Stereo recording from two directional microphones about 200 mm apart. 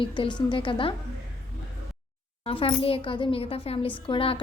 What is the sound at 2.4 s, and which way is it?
A woman's voice, 30° left (ahead or behind).